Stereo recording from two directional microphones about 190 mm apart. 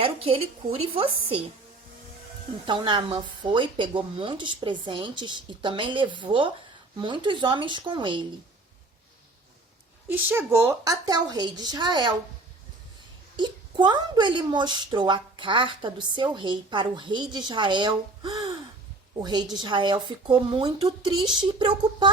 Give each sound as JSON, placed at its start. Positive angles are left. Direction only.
{"t": 0.0, "sound": "speech", "side_deg": -30}
{"t": 2.6, "sound": "speech", "side_deg": -25}
{"t": 10.1, "sound": "speech", "side_deg": -15}
{"t": 13.3, "sound": "speech", "side_deg": -25}